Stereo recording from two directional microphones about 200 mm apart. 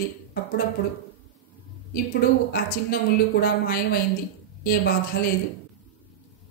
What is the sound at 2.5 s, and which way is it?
A woman's voice, 50° left (ahead or behind).